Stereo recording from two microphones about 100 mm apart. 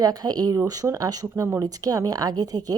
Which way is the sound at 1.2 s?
25° right (ahead or behind).